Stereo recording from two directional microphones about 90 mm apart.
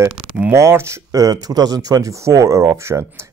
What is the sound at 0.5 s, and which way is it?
Speech, 30° right (ahead or behind).